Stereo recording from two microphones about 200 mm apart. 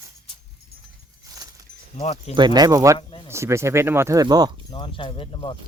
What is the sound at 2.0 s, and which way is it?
Speech, 30° left (ahead or behind).